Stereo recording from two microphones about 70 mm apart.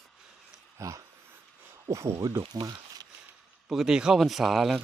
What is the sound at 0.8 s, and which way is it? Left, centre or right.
Speech, right.